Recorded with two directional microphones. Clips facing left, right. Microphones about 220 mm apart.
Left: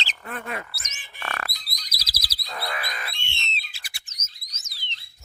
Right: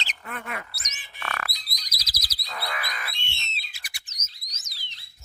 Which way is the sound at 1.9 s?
30° left (ahead or behind).